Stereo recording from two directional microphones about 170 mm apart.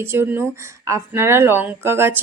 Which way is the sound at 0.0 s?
15° right (ahead or behind).